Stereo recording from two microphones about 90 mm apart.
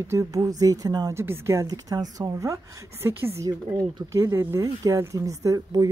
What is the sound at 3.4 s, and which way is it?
Speech, 40° right (ahead or behind).